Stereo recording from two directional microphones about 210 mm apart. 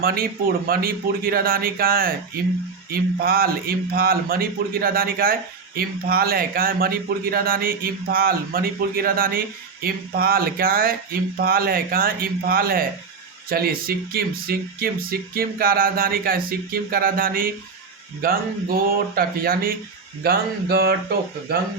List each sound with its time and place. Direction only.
0.0 s speech: 45° right (ahead or behind)